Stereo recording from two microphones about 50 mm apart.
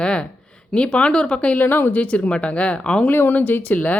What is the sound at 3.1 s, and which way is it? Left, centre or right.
Speech, left.